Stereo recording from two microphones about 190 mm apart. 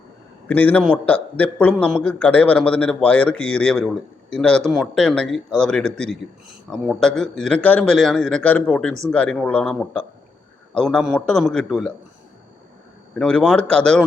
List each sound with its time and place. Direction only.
0.4 s a man's voice: 10° left (ahead or behind)
13.1 s a man's voice: 5° left (ahead or behind)